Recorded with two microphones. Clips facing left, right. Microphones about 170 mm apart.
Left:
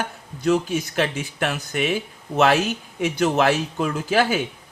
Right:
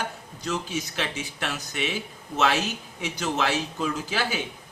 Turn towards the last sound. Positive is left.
turn(degrees=50)  # may be behind; listen again after turning